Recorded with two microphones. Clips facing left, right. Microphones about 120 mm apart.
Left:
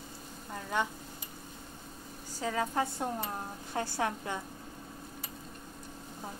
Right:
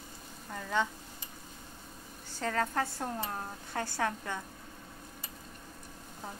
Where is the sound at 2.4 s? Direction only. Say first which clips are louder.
Even; 10° left (ahead or behind).